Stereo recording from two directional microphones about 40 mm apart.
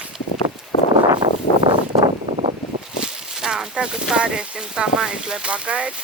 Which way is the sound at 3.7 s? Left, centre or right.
Centre.